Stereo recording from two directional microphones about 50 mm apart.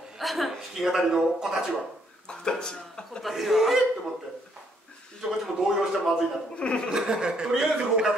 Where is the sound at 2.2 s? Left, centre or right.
Centre.